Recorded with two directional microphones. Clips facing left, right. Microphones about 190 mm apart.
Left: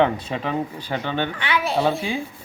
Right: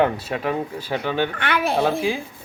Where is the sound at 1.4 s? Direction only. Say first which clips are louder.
Even; 55° right (ahead or behind).